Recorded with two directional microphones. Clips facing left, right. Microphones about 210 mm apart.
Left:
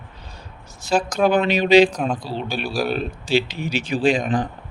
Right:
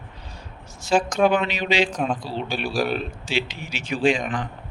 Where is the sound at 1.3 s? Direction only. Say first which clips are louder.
Left 8 dB; 40° left (ahead or behind).